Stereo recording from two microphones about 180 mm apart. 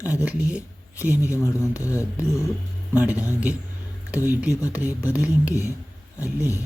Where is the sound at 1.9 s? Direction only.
15° left (ahead or behind).